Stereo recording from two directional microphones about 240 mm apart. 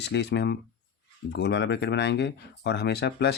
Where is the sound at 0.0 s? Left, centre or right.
Left.